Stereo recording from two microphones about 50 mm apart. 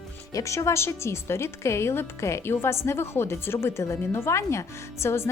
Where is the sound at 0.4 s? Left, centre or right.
Left.